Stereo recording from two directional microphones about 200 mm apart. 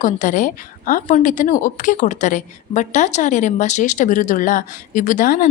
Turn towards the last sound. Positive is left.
turn(degrees=40)  # may be behind; listen again after turning